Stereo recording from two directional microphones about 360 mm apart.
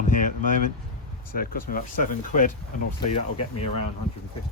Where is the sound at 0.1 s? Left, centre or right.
Left.